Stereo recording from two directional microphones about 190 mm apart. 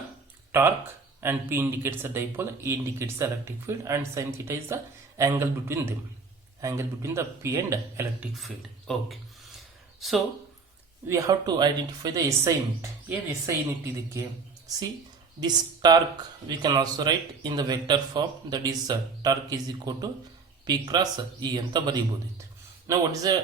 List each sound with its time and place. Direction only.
0.5 s speech: 15° right (ahead or behind)
8.9 s a sound: centre (ahead or behind)
11.1 s speech: 20° right (ahead or behind)
15.4 s speech: 20° right (ahead or behind)